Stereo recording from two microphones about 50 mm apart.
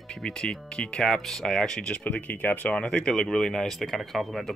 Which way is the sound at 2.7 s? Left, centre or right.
Centre.